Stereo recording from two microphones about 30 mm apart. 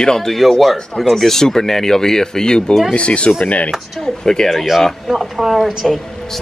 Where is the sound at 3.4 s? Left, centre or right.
Left.